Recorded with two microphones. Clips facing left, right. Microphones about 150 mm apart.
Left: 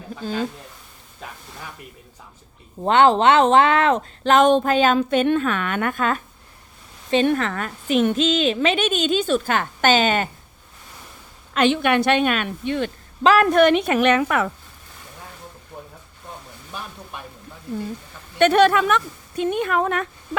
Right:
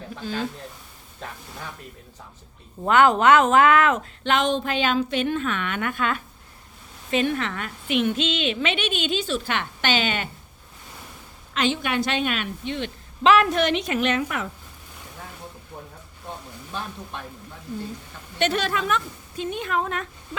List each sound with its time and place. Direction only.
1.2 s a sound: 5° left (ahead or behind)
2.8 s speech: 30° left (ahead or behind)
7.3 s a woman's voice: 40° left (ahead or behind)
11.5 s a woman's voice: 60° left (ahead or behind)
13.9 s a woman's voice: 70° left (ahead or behind)
18.3 s a woman's voice: 55° left (ahead or behind)